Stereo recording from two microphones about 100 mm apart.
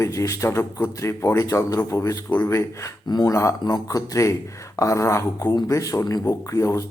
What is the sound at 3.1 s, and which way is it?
Speech, 40° left (ahead or behind).